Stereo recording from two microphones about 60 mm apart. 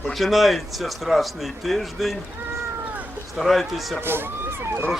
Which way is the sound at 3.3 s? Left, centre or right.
Centre.